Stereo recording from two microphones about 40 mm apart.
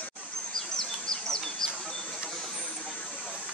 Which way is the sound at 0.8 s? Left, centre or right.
Centre.